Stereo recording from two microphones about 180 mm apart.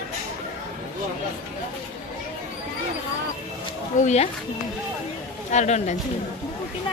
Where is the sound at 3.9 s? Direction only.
40° left (ahead or behind).